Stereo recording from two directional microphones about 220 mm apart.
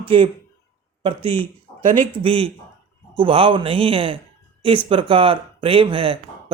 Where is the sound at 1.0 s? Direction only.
25° right (ahead or behind).